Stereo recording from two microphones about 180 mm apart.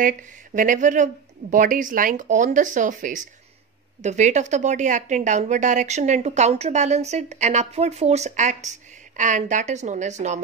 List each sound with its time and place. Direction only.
0.6 s a woman's voice: 45° right (ahead or behind)